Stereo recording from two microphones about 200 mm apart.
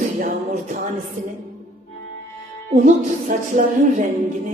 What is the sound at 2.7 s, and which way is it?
Speech, 40° right (ahead or behind).